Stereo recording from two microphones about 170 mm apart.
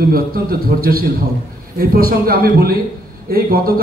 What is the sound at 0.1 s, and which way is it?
A man's voice, 60° right (ahead or behind).